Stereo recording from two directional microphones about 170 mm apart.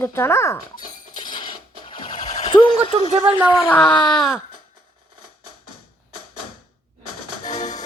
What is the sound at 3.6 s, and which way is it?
Speech, 10° left (ahead or behind).